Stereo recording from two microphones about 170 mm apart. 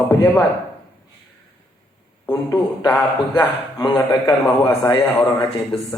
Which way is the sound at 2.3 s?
20° left (ahead or behind).